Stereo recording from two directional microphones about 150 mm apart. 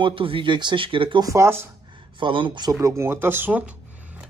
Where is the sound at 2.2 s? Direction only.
35° right (ahead or behind).